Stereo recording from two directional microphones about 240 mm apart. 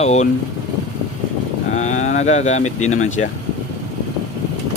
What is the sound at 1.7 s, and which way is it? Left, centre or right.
Speech, left.